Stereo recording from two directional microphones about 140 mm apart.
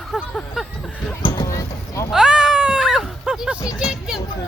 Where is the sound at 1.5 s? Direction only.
20° left (ahead or behind).